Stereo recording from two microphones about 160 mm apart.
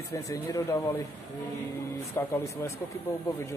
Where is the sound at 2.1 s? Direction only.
15° left (ahead or behind).